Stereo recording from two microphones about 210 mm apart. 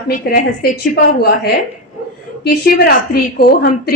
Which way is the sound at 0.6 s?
45° left (ahead or behind).